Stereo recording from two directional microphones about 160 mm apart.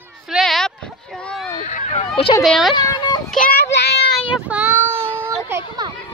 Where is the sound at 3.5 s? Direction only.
90° left.